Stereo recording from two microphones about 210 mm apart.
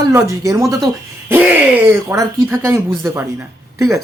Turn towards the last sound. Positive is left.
turn(degrees=-15)  # may be behind; listen again after turning